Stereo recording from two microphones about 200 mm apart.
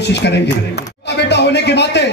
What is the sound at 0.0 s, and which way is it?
A man's voice, 60° left (ahead or behind).